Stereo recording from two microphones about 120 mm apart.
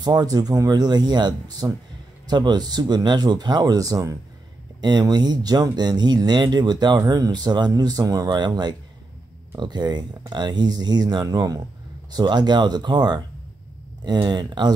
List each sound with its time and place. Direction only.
0.0 s speech: 35° right (ahead or behind)